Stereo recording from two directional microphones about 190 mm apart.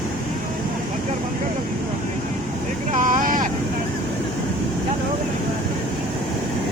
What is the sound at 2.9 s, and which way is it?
Vehicle, 40° right (ahead or behind).